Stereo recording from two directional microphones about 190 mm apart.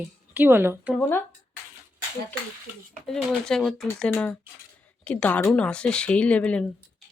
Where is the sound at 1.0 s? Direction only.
10° left (ahead or behind).